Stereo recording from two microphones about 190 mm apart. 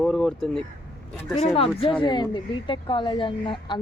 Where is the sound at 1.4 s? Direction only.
30° left (ahead or behind).